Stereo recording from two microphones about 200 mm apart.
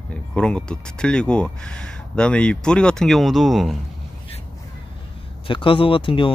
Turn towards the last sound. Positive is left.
turn(degrees=25)  # may be behind; listen again after turning